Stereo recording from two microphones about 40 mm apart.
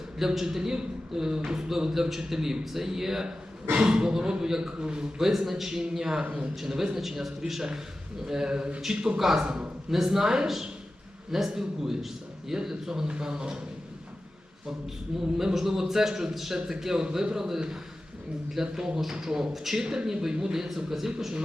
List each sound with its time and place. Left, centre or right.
0.3 s a man's voice: centre
9.1 s a man's voice: centre
9.4 s speech: right
9.9 s a man's voice: centre
15.1 s a man's voice: centre